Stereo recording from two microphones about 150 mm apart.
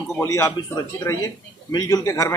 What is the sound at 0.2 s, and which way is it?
A man's voice, 15° left (ahead or behind).